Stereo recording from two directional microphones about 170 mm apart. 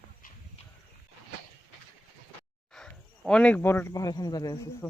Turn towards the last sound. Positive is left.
turn(degrees=15)  # may be behind; listen again after turning